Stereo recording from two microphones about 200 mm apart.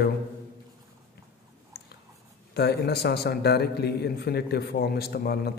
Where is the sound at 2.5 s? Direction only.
55° left (ahead or behind).